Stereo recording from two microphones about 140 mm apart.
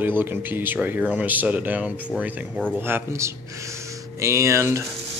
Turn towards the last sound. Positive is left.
turn(degrees=-20)  # may be behind; listen again after turning